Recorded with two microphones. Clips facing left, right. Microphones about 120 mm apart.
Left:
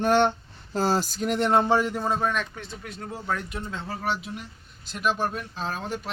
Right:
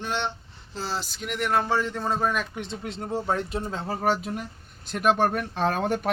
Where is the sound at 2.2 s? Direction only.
5° right (ahead or behind).